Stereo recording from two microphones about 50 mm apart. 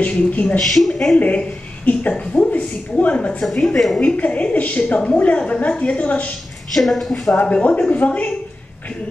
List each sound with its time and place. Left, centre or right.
0.0 s a man's voice: left
0.6 s a woman's voice: centre
1.1 s a woman's voice: left
3.5 s a woman's voice: centre
4.0 s a woman's voice: left
6.7 s a woman's voice: centre
7.6 s a woman's voice: left